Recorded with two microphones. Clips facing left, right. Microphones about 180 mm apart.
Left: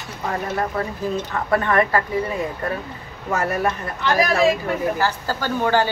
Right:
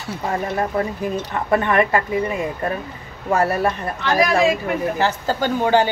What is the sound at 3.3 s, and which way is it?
Speech, 35° right (ahead or behind).